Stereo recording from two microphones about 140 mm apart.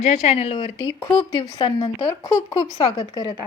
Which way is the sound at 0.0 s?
50° left (ahead or behind).